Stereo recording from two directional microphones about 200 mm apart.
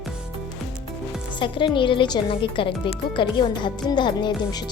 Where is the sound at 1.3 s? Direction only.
25° left (ahead or behind).